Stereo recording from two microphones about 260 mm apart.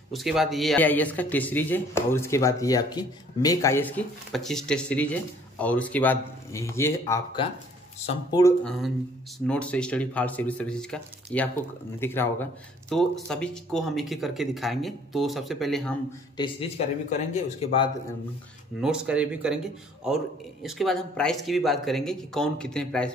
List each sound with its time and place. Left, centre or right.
0.1 s speech: centre
8.3 s speech: centre
16.3 s speech: left
18.8 s speech: centre